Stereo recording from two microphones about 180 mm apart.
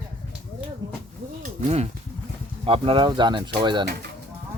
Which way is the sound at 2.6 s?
30° right (ahead or behind).